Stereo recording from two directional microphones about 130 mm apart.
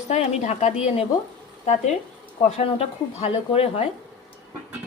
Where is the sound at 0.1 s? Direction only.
65° left (ahead or behind).